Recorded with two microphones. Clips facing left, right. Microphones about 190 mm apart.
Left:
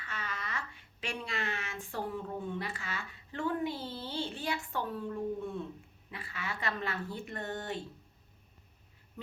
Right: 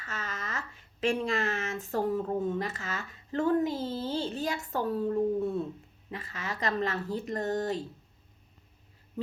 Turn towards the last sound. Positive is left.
turn(degrees=-40)  # may be behind; listen again after turning